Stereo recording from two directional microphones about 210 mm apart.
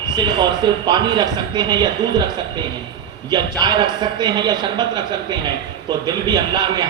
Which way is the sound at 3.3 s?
20° right (ahead or behind).